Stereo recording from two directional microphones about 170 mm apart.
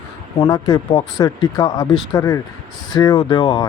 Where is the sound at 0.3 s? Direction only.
20° left (ahead or behind).